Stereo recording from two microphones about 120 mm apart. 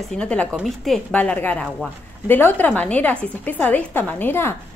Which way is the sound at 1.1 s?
15° left (ahead or behind).